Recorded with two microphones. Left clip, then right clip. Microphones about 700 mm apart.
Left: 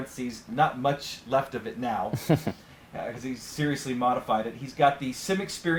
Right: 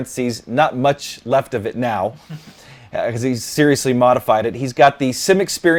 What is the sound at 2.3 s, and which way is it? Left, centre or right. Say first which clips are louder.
Speech: left 15 dB; left.